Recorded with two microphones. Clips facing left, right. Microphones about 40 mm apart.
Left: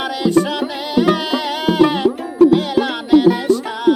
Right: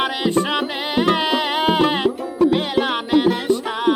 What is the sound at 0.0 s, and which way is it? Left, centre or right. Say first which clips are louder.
Music: left 3 dB; right.